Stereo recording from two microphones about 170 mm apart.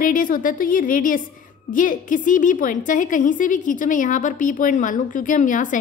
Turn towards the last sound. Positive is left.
turn(degrees=50)  # may be behind; listen again after turning